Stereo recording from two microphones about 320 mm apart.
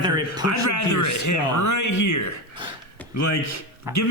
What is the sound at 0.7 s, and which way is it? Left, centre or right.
Speech, left.